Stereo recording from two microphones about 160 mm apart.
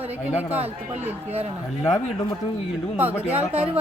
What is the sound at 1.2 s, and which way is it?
Speech, 40° right (ahead or behind).